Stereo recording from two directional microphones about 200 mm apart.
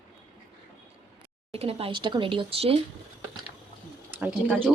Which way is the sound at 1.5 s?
30° right (ahead or behind).